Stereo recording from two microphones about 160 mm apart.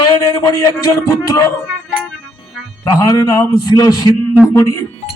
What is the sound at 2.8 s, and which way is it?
A man's voice, 25° left (ahead or behind).